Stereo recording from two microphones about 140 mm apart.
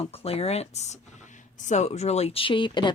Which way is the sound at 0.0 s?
45° left (ahead or behind).